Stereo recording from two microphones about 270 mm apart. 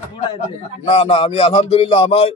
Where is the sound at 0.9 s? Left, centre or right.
Left.